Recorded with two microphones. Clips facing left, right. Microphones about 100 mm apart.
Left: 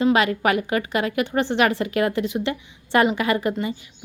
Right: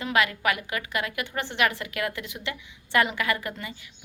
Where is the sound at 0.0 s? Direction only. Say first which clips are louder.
Left 6 dB; 30° left (ahead or behind).